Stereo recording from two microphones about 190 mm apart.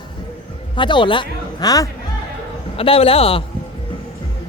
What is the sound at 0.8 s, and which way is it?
Speech, 25° left (ahead or behind).